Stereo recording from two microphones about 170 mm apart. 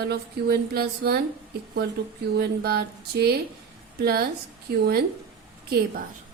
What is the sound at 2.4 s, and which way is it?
Speech, 65° right (ahead or behind).